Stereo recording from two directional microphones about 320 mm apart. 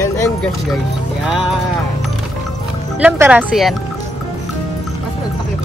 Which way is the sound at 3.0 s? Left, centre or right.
Centre.